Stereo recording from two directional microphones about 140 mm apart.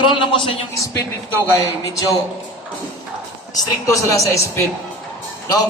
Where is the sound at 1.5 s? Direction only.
25° left (ahead or behind).